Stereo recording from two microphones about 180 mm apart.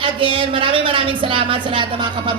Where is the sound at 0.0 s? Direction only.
30° right (ahead or behind).